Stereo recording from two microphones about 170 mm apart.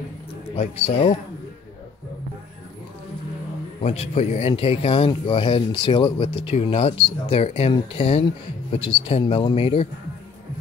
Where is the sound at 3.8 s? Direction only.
40° left (ahead or behind).